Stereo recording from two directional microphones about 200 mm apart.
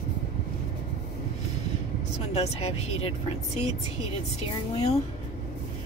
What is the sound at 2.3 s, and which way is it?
Speech, 30° left (ahead or behind).